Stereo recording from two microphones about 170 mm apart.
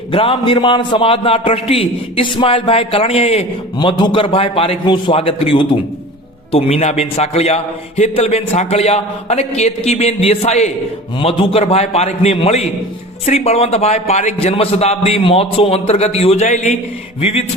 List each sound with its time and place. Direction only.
0.1 s a man's voice: 30° left (ahead or behind)
3.8 s a man's voice: 25° left (ahead or behind)